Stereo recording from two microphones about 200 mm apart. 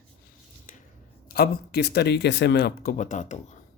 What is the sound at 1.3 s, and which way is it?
Speech, 50° left (ahead or behind).